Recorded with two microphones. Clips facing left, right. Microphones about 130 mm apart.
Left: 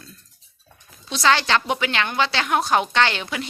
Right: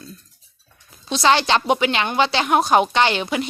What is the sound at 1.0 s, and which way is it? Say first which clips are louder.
A woman's voice: right 3 dB; 20° right (ahead or behind).